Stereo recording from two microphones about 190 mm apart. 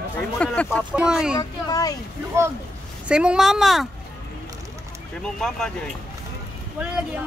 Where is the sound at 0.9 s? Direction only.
5° right (ahead or behind).